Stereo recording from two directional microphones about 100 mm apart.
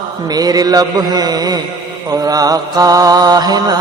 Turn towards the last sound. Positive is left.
turn(degrees=-45)  # may be behind; listen again after turning